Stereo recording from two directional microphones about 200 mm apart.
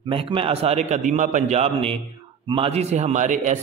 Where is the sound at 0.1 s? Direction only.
25° right (ahead or behind).